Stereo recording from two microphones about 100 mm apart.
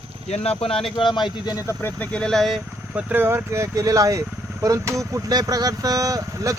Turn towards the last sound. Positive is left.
turn(degrees=-35)  # may be behind; listen again after turning